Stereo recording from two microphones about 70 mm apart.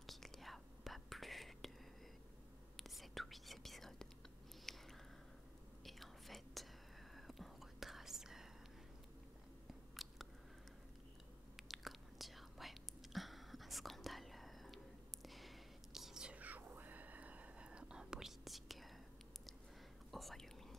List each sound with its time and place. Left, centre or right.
0.0 s whispering: centre
2.8 s whispering: centre
4.6 s a sound: centre
5.9 s whispering: centre
10.0 s biting: centre
11.5 s whispering: centre
16.3 s whispering: right; by 18.9 s centre
20.1 s whispering: centre